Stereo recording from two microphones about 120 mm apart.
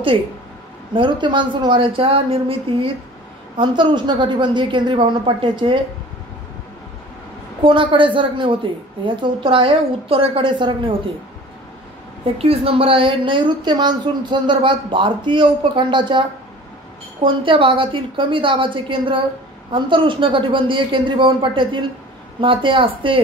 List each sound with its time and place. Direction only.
0.9 s speech: 40° right (ahead or behind)
3.5 s a woman's voice: 40° right (ahead or behind)
7.6 s speech: 45° right (ahead or behind)
12.4 s speech: 55° right (ahead or behind)